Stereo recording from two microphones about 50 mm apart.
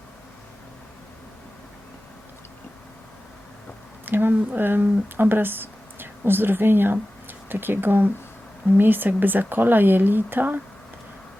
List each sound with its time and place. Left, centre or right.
4.0 s speech: right